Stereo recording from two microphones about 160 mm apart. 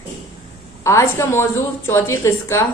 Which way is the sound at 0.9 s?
15° left (ahead or behind).